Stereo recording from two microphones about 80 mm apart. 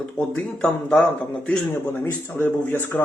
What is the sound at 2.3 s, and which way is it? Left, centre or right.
Speech, left.